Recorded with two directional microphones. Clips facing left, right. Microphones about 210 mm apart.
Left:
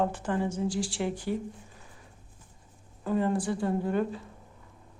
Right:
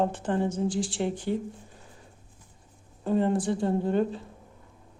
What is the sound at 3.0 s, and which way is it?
Speech, 25° right (ahead or behind).